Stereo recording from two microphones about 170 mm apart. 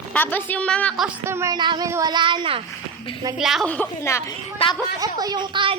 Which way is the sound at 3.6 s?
10° left (ahead or behind).